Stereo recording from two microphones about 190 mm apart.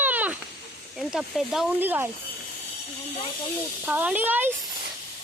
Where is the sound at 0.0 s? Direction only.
10° right (ahead or behind).